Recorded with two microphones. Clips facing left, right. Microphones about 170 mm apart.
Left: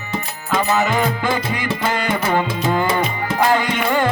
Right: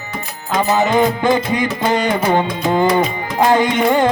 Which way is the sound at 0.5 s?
20° right (ahead or behind).